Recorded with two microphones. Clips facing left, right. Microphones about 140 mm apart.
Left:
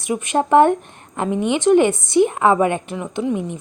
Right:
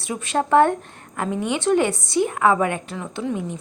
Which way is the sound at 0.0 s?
20° left (ahead or behind).